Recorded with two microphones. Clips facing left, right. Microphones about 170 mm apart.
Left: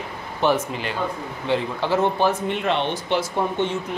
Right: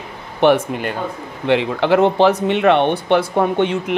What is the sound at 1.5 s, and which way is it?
Speech, 70° right (ahead or behind).